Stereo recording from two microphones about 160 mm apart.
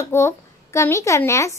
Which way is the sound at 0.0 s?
15° left (ahead or behind).